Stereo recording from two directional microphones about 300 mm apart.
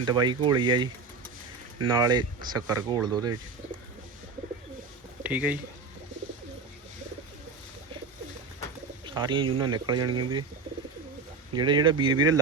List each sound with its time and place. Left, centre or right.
0.0 s speech: centre
2.0 s speech: centre
5.2 s speech: centre
9.0 s speech: centre
11.5 s speech: centre